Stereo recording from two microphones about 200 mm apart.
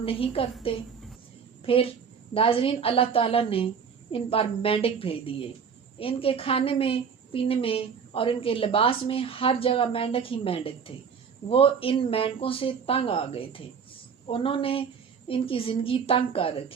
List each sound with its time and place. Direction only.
0.0 s a woman's voice: 30° left (ahead or behind)